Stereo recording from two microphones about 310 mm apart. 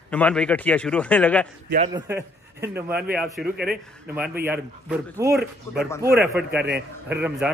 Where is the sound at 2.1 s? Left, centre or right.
Centre.